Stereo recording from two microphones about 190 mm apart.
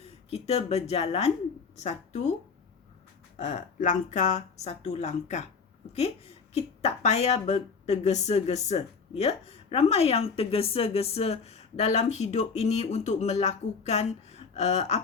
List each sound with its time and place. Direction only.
0.0 s speech: 35° left (ahead or behind)
3.3 s speech: 40° left (ahead or behind)
6.5 s speech: 35° left (ahead or behind)